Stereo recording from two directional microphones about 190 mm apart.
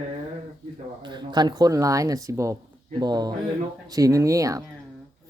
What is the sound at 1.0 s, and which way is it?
Speech, 25° right (ahead or behind).